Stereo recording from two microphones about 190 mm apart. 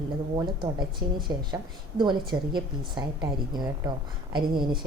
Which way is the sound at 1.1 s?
25° right (ahead or behind).